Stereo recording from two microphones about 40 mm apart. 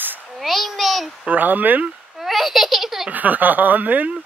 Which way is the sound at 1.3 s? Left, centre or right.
Right.